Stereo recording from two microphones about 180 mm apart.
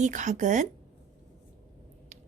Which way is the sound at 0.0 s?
45° right (ahead or behind).